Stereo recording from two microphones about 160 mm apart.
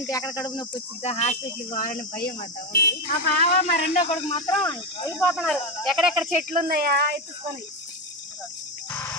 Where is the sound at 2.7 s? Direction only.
85° left.